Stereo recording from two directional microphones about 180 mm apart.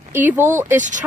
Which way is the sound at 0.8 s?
45° right (ahead or behind).